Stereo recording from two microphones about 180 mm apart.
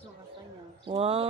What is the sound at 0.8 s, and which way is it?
Speech, 30° right (ahead or behind).